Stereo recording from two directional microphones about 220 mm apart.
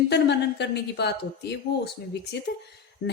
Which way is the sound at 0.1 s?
50° left (ahead or behind).